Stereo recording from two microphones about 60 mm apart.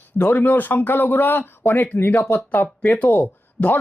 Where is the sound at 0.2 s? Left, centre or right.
Left.